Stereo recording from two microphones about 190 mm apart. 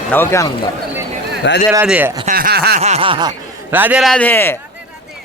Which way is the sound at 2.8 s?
35° right (ahead or behind).